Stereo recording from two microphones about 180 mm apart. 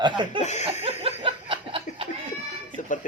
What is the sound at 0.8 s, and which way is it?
Laughter, 35° right (ahead or behind).